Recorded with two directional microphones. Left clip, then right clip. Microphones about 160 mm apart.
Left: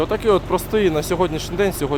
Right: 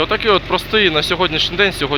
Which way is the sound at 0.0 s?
30° left (ahead or behind).